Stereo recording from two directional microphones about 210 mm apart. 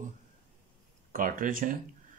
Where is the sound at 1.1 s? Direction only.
40° right (ahead or behind).